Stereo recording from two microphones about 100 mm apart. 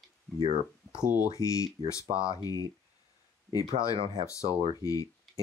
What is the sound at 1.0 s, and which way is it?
Speech, 15° right (ahead or behind).